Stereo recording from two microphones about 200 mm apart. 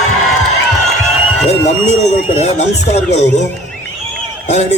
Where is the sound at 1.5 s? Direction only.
35° left (ahead or behind).